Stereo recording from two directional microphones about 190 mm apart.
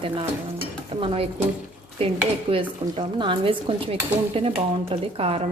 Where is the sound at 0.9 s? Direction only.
30° right (ahead or behind).